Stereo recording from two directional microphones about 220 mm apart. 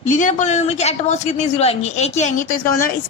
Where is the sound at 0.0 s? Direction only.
35° left (ahead or behind).